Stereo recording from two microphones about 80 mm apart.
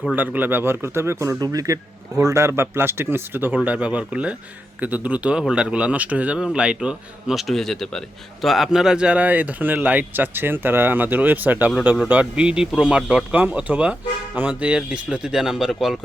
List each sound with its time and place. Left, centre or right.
0.2 s a man's voice: right; by 16.0 s centre